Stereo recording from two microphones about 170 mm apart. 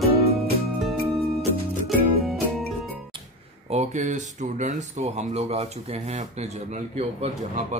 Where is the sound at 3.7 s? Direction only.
45° right (ahead or behind).